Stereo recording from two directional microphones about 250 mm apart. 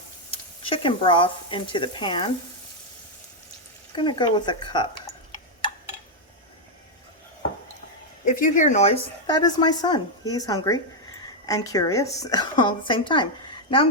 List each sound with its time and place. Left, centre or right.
0.3 s speech: centre
3.9 s speech: centre
8.2 s speech: left